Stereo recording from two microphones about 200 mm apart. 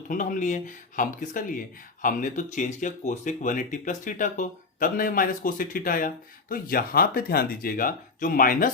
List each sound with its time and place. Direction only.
0.1 s speech: 40° left (ahead or behind)